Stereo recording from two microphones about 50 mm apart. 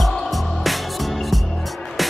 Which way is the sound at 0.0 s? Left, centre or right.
Centre.